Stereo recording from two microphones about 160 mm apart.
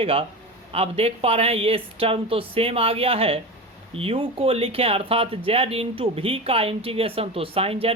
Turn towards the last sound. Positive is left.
turn(degrees=-35)  # may be behind; listen again after turning